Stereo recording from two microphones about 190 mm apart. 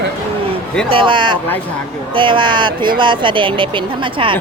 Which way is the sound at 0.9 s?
25° right (ahead or behind).